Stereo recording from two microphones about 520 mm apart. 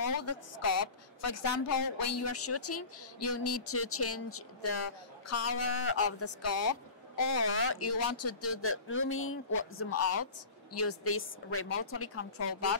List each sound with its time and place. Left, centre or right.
0.2 s a woman's voice: left